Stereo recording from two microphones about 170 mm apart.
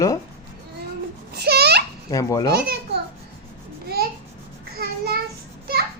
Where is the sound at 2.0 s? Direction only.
20° left (ahead or behind).